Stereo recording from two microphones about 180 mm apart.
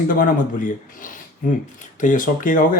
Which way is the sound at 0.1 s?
50° left (ahead or behind).